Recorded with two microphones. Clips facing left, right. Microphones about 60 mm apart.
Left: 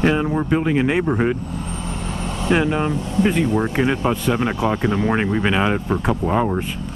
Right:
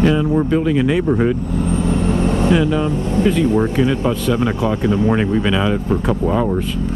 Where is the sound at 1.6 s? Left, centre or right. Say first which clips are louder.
Right 10 dB; right.